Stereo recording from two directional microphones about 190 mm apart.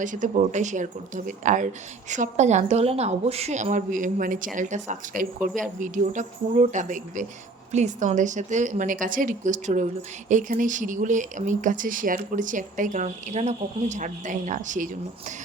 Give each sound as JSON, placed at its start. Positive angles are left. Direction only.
{"t": 0.0, "sound": "a woman's voice", "side_deg": -40}